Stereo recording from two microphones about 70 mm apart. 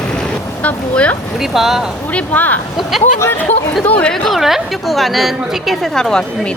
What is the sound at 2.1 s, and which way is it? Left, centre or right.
Speech, left.